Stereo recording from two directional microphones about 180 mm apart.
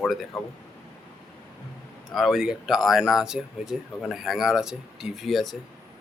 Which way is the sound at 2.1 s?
Centre (ahead or behind).